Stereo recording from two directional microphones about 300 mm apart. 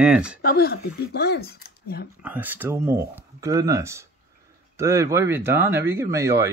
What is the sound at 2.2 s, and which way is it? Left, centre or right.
Speech, centre.